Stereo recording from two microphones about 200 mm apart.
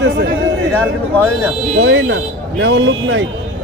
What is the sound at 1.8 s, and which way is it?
Speech, 70° right (ahead or behind).